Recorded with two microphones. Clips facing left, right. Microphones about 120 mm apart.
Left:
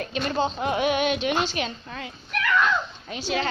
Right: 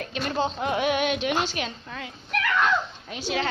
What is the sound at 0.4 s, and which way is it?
Music, 5° left (ahead or behind).